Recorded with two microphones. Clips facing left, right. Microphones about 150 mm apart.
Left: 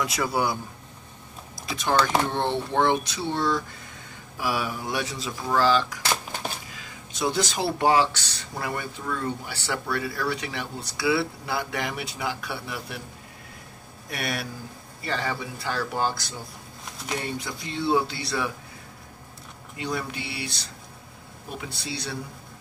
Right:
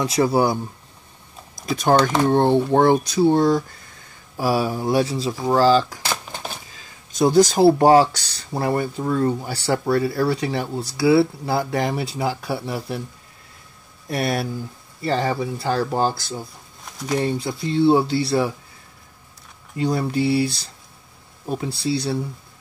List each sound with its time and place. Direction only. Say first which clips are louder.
0.0 s speech: right 7 dB; 30° right (ahead or behind)
1.7 s speech: right 6 dB; 45° right (ahead or behind)
14.0 s speech: right 8 dB; 35° right (ahead or behind)
19.8 s speech: right 10 dB; 35° right (ahead or behind)